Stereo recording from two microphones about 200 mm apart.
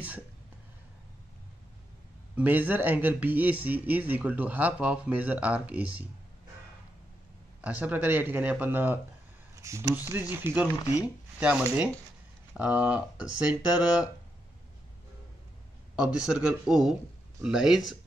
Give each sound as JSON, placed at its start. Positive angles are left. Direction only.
{"t": 2.3, "sound": "speech", "side_deg": -10}
{"t": 7.6, "sound": "speech", "side_deg": -5}
{"t": 16.0, "sound": "speech", "side_deg": -5}